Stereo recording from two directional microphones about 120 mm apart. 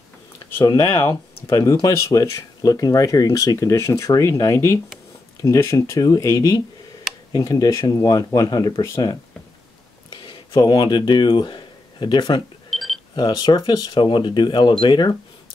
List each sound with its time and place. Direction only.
0.6 s speech: 30° left (ahead or behind)
10.0 s speech: 40° left (ahead or behind)
12.6 s alarm clock: centre (ahead or behind)
13.1 s speech: 35° left (ahead or behind)